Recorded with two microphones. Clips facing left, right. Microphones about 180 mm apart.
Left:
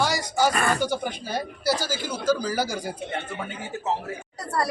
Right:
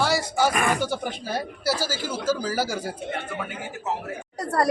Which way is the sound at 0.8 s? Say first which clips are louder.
Left 1 dB; centre (ahead or behind).